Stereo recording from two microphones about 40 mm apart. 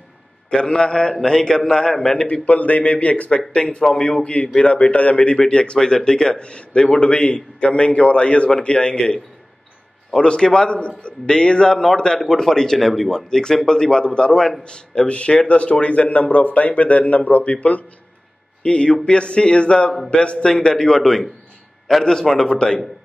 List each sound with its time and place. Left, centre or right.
0.5 s a man's voice: left
2.4 s a man's voice: left
3.9 s a man's voice: centre
4.2 s a man's voice: left
18.6 s a man's voice: left
20.4 s a man's voice: centre